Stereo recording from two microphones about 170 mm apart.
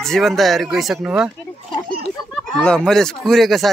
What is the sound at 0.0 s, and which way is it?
Speech, centre (ahead or behind).